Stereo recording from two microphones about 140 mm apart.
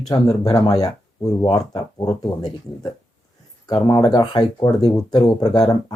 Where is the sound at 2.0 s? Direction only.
30° left (ahead or behind).